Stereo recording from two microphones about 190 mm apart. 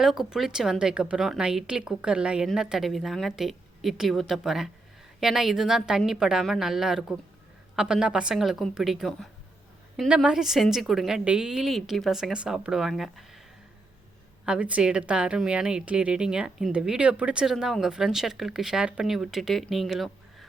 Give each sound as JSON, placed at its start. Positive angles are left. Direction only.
{"t": 0.0, "sound": "a woman's voice", "side_deg": 0}
{"t": 14.4, "sound": "a woman's voice", "side_deg": -5}